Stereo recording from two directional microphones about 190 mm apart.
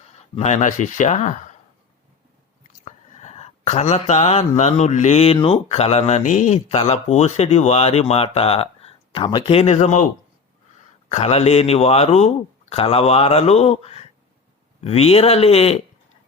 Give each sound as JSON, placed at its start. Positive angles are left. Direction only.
{"t": 0.3, "sound": "speech", "side_deg": 35}
{"t": 2.8, "sound": "speech", "side_deg": 35}
{"t": 11.1, "sound": "speech", "side_deg": 35}